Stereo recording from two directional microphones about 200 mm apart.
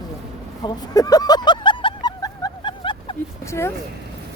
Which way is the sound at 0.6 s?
20° left (ahead or behind).